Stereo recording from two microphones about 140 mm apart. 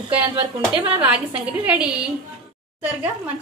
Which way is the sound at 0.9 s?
10° right (ahead or behind).